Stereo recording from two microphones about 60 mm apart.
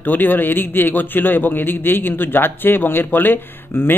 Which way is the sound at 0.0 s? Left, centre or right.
Left.